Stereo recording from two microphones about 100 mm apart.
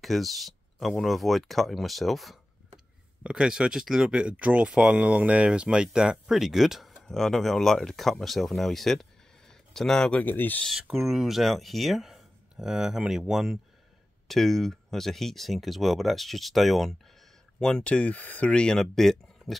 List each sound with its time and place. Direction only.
0.0 s speech: centre (ahead or behind)
10.2 s speech: 20° left (ahead or behind)
10.7 s speech: centre (ahead or behind)